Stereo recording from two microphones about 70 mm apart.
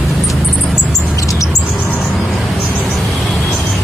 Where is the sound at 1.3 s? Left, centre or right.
Left.